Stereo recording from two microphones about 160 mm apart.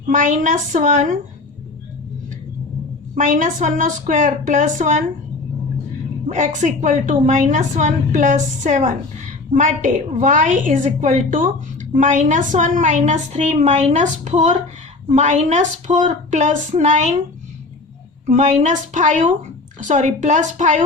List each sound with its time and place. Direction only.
0.1 s a woman's voice: 55° right (ahead or behind)
3.2 s a woman's voice: 55° right (ahead or behind)
6.2 s a woman's voice: 50° right (ahead or behind)
18.3 s a woman's voice: 50° right (ahead or behind)